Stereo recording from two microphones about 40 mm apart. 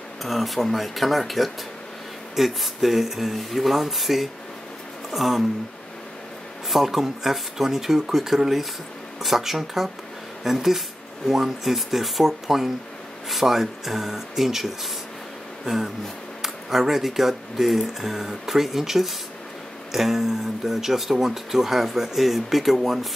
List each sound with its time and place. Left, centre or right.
0.2 s speech: centre
6.7 s speech: centre
16.4 s speech: centre